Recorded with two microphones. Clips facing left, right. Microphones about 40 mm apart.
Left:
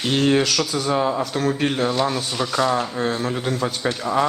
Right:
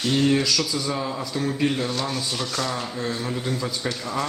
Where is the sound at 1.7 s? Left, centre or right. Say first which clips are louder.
Left 4 dB; left.